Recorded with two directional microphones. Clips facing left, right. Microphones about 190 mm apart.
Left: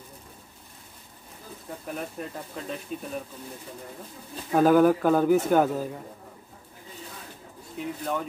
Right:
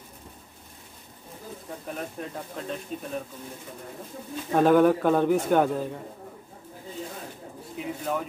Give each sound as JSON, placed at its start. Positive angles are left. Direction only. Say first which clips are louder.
{"t": 1.9, "sound": "a man's voice", "louder": "left 1 dB", "side_deg": 0}
{"t": 4.5, "sound": "a man's voice", "louder": "even", "side_deg": 5}
{"t": 7.7, "sound": "a man's voice", "louder": "even", "side_deg": 0}